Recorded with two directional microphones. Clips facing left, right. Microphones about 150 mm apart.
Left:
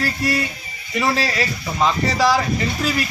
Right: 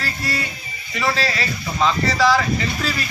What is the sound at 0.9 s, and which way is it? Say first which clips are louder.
Speech: left 2 dB; 15° left (ahead or behind).